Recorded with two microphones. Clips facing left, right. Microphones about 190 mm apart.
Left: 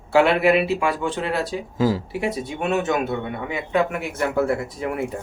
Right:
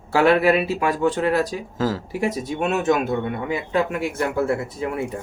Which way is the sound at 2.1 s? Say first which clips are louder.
Right 2 dB; 40° right (ahead or behind).